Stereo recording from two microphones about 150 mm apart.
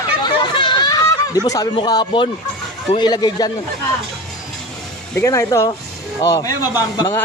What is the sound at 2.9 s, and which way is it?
Speech, 30° left (ahead or behind).